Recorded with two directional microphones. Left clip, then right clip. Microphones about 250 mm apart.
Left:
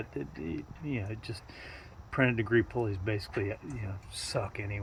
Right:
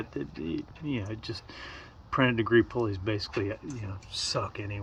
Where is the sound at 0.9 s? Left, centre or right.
Centre.